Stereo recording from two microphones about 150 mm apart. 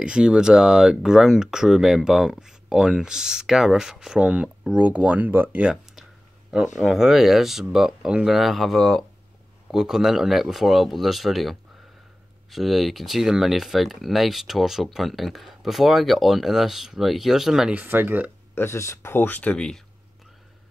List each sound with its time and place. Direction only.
0.0 s speech: 5° right (ahead or behind)
18.5 s speech: 15° left (ahead or behind)